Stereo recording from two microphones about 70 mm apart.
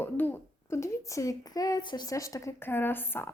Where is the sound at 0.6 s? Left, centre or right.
Left.